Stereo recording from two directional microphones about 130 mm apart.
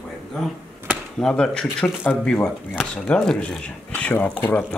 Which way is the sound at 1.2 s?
5° left (ahead or behind).